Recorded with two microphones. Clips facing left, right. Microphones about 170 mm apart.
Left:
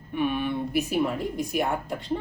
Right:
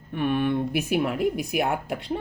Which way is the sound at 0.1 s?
50° right (ahead or behind).